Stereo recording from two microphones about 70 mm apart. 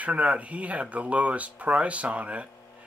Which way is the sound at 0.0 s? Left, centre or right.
Right.